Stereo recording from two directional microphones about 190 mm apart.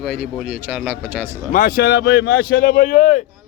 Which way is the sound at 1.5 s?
50° left (ahead or behind).